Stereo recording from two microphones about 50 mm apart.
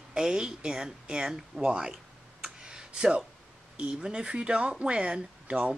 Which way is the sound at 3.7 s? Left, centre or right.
Centre.